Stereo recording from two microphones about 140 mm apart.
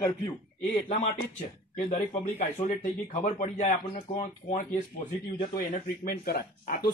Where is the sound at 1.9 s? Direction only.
55° left (ahead or behind).